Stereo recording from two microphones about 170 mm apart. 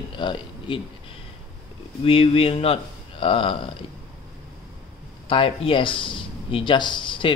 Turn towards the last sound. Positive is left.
turn(degrees=30)  # may be behind; listen again after turning